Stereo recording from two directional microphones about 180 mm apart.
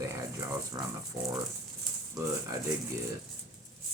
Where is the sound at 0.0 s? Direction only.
15° right (ahead or behind).